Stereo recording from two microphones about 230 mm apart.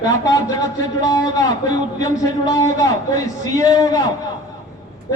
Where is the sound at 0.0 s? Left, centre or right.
Centre.